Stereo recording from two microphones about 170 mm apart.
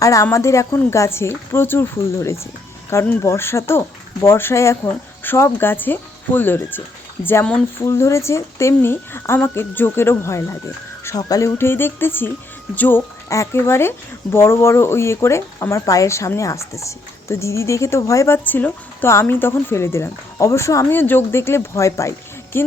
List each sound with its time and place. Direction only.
0.0 s speech: 20° left (ahead or behind)